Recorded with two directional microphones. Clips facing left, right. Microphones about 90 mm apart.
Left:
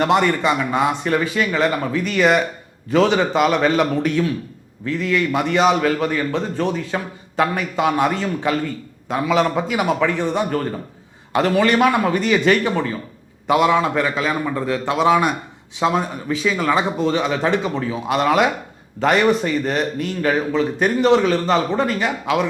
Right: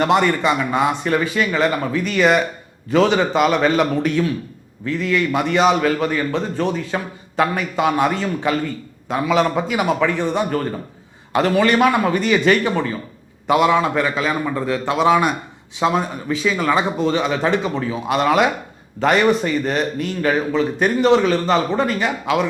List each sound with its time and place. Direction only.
0.0 s a man's voice: 15° right (ahead or behind)